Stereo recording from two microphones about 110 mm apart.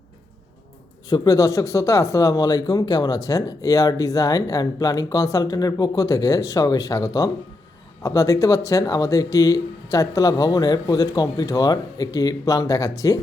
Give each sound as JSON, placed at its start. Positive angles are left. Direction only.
{"t": 1.1, "sound": "speech", "side_deg": 35}